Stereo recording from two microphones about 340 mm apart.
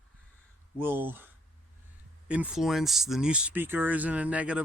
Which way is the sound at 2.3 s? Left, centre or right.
Centre.